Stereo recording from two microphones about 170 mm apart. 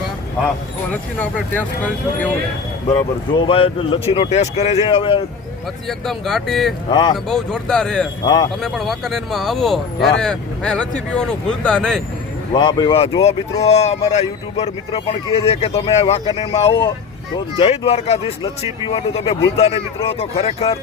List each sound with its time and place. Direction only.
0.4 s speech: 10° left (ahead or behind)
2.9 s speech: 25° left (ahead or behind)
5.9 s speech: centre (ahead or behind)
6.9 s speech: 25° left (ahead or behind)
7.3 s speech: 5° left (ahead or behind)
8.2 s speech: 25° left (ahead or behind)
8.6 s speech: centre (ahead or behind)
12.5 s speech: 25° left (ahead or behind)
13.2 s speech: 40° left (ahead or behind)